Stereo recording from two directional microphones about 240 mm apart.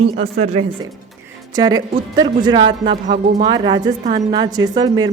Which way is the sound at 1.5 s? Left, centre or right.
Centre.